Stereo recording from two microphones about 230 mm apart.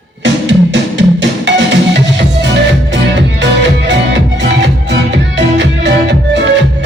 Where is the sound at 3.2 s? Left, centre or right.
Right.